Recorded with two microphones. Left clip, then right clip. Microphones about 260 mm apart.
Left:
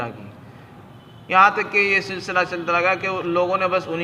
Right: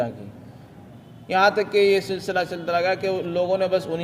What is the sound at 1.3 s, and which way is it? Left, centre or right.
A man's voice, right.